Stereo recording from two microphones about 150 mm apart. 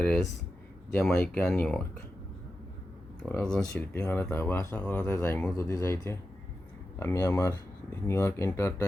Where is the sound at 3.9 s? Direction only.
20° left (ahead or behind).